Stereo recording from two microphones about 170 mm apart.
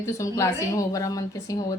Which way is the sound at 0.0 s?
20° left (ahead or behind).